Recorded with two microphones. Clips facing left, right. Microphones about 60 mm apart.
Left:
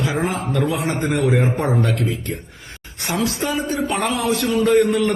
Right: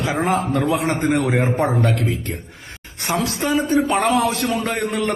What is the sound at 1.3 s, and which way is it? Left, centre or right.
A man's voice, right.